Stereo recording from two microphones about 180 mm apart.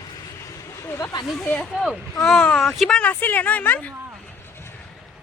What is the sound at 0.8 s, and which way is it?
Snake, 20° left (ahead or behind).